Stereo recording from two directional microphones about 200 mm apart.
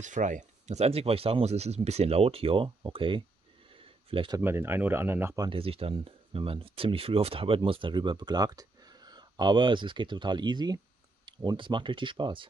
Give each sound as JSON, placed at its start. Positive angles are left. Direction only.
{"t": 0.0, "sound": "speech", "side_deg": -40}
{"t": 3.7, "sound": "a sound", "side_deg": -25}
{"t": 4.4, "sound": "speech", "side_deg": -10}